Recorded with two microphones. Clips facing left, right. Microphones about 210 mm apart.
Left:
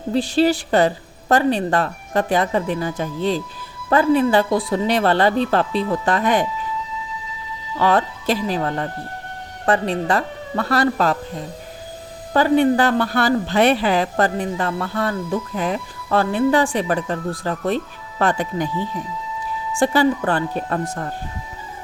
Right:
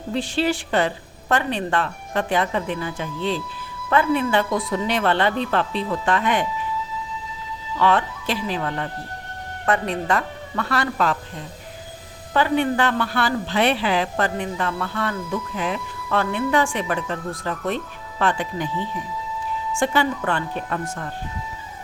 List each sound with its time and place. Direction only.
0.1 s a woman's voice: 40° left (ahead or behind)
7.8 s a woman's voice: 40° left (ahead or behind)
12.3 s a woman's voice: 40° left (ahead or behind)
19.8 s a woman's voice: 35° left (ahead or behind)